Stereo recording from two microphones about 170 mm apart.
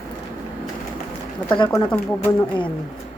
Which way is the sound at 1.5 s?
25° left (ahead or behind).